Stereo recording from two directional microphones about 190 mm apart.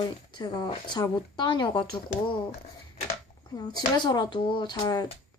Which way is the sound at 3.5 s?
20° left (ahead or behind).